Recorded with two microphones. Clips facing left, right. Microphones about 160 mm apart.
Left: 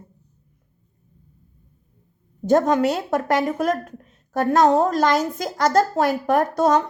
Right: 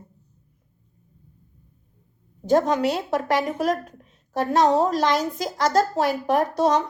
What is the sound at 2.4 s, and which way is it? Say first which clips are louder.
A woman's voice: left 2 dB; 50° left (ahead or behind).